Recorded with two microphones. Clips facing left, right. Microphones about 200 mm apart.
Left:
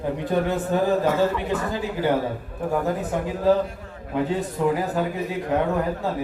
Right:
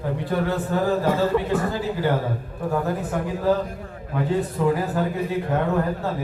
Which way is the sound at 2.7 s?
20° left (ahead or behind).